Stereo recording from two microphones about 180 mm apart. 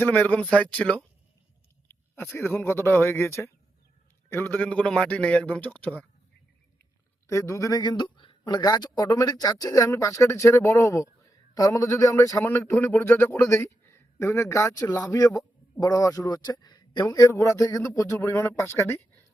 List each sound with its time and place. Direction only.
0.0 s speech: 10° left (ahead or behind)
7.3 s speech: 15° left (ahead or behind)